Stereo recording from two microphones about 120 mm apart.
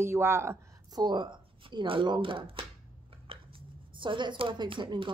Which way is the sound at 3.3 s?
55° right (ahead or behind).